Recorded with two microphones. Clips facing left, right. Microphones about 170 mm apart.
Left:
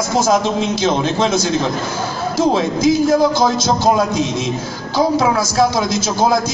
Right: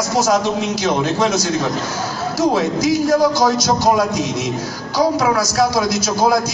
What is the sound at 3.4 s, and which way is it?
A man's voice, 25° left (ahead or behind).